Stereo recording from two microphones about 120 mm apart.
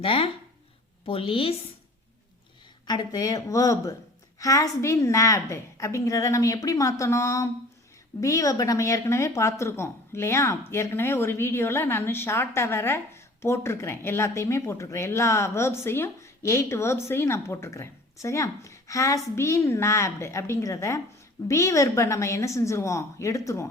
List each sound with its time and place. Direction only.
0.0 s a woman's voice: 50° left (ahead or behind)
2.8 s a woman's voice: 35° left (ahead or behind)